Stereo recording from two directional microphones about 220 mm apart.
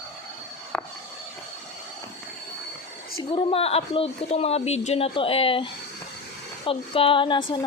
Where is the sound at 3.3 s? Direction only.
25° left (ahead or behind).